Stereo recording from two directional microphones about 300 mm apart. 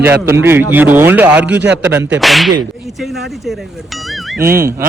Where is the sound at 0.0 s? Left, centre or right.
Centre.